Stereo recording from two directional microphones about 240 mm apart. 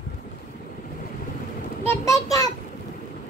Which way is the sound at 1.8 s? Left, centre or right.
Centre.